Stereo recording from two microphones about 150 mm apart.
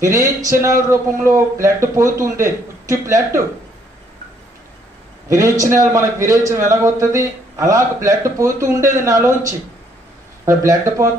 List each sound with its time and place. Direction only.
0.0 s a man's voice: 20° right (ahead or behind)
5.3 s a man's voice: 20° right (ahead or behind)